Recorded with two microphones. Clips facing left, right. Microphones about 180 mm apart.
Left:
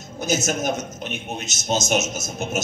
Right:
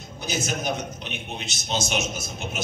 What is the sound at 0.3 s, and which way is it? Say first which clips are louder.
A man's voice: left 5 dB; 45° left (ahead or behind).